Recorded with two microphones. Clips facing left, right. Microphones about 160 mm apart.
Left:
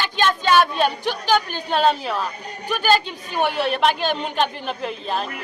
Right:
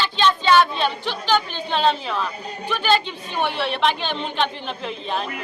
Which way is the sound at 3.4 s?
40° left (ahead or behind).